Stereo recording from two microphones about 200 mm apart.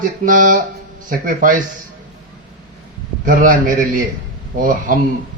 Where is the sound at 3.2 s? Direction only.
45° right (ahead or behind).